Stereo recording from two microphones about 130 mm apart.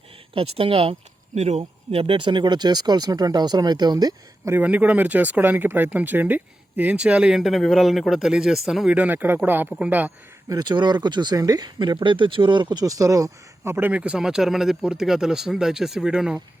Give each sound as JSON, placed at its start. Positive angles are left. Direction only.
{"t": 0.3, "sound": "speech", "side_deg": -45}
{"t": 1.4, "sound": "speech", "side_deg": -55}
{"t": 4.5, "sound": "speech", "side_deg": -10}
{"t": 10.5, "sound": "speech", "side_deg": -35}